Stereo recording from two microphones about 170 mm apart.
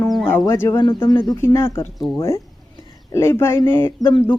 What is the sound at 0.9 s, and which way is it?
Speech, 30° left (ahead or behind).